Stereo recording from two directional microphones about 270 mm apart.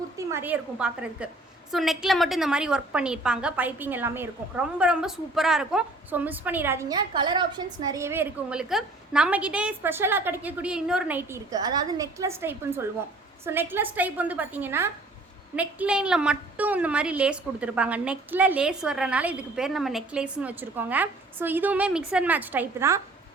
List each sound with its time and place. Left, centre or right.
0.3 s a woman's voice: centre